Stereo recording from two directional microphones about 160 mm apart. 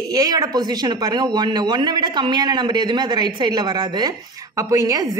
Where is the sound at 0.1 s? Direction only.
25° right (ahead or behind).